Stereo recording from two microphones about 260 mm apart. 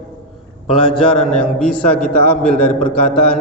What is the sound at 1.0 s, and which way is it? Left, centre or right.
Mantra, centre.